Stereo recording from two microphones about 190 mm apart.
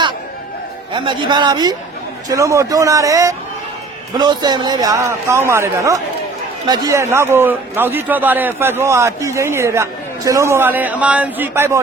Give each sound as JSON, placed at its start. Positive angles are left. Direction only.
{"t": 0.9, "sound": "a man's voice", "side_deg": -25}